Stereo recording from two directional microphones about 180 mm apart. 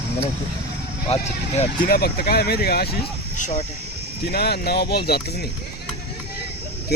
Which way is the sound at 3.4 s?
45° left (ahead or behind).